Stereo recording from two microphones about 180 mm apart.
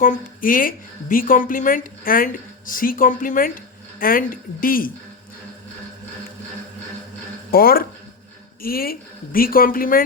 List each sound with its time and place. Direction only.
0.0 s speech: 50° left (ahead or behind)
7.5 s speech: 55° left (ahead or behind)